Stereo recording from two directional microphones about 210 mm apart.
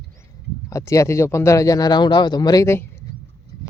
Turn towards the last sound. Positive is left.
turn(degrees=10)  # may be behind; listen again after turning